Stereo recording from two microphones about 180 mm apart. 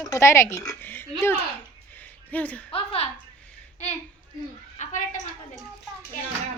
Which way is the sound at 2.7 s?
30° left (ahead or behind).